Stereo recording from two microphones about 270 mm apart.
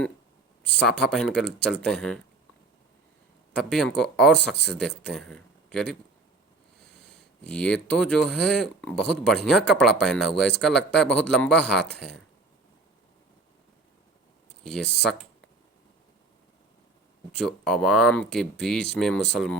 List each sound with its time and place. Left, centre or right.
0.6 s speech: centre
3.6 s speech: centre
7.2 s speech: centre
14.6 s speech: centre
17.3 s speech: centre